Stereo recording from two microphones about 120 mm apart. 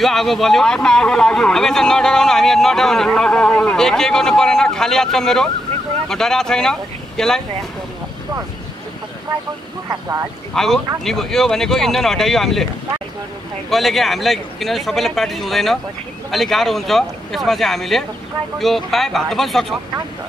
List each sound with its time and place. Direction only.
0.0 s speech: centre (ahead or behind)
9.8 s speech: 25° right (ahead or behind)
10.5 s speech: 5° left (ahead or behind)
13.7 s speech: centre (ahead or behind)